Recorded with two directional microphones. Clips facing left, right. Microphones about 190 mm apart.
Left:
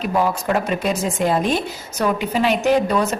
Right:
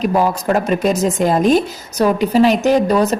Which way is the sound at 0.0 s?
45° right (ahead or behind).